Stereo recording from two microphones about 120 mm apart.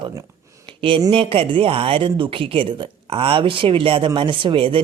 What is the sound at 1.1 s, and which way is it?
Speech, 55° right (ahead or behind).